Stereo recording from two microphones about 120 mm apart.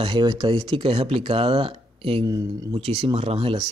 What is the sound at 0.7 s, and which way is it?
Speech, 45° right (ahead or behind).